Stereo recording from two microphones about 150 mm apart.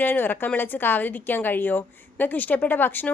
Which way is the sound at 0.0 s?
15° left (ahead or behind).